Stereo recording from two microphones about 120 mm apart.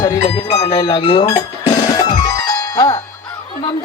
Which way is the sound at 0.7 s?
40° left (ahead or behind).